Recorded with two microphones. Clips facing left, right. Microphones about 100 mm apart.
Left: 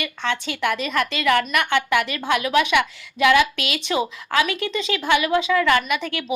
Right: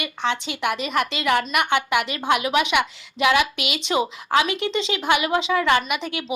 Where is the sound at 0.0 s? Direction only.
20° right (ahead or behind).